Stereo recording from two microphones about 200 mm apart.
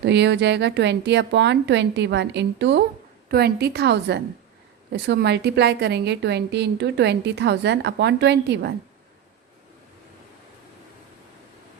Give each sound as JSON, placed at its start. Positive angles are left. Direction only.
{"t": 0.0, "sound": "a woman's voice", "side_deg": -60}